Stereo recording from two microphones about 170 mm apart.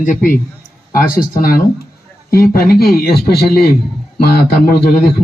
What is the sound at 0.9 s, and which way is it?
Speech, 55° left (ahead or behind).